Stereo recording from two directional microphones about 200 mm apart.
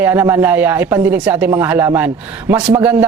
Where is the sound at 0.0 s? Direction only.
10° right (ahead or behind).